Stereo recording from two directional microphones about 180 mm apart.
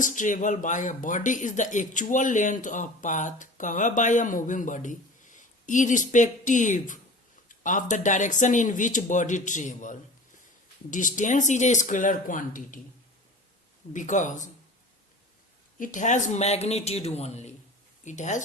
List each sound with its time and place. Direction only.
0.0 s speech: 45° left (ahead or behind)
13.9 s speech: 45° left (ahead or behind)
15.8 s speech: 45° left (ahead or behind)